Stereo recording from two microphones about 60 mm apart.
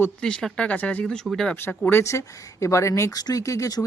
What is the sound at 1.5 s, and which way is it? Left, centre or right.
Speech, left.